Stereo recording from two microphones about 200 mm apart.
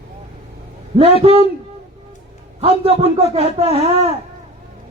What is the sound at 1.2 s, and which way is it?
Music, 30° right (ahead or behind).